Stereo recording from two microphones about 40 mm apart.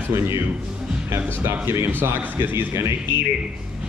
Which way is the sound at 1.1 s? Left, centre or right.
Right.